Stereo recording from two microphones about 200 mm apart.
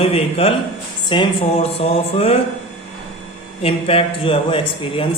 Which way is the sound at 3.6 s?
30° left (ahead or behind).